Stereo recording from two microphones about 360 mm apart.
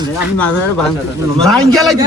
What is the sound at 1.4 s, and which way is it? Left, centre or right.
Speech, centre.